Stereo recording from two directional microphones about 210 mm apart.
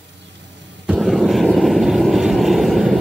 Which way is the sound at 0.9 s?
Centre (ahead or behind).